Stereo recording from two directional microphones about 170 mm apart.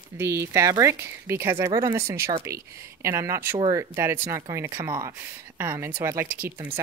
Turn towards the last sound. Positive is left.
turn(degrees=-10)  # may be behind; listen again after turning